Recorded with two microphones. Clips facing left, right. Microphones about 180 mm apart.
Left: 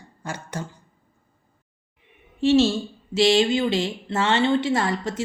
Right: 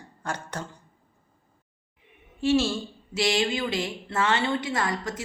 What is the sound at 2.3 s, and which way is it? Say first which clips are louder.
Speech: left 5 dB; 25° left (ahead or behind).